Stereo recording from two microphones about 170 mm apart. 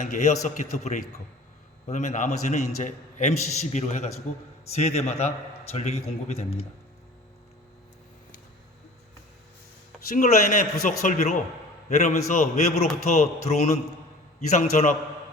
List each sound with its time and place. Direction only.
0.0 s a man's voice: 45° left (ahead or behind)
10.1 s a man's voice: 50° left (ahead or behind)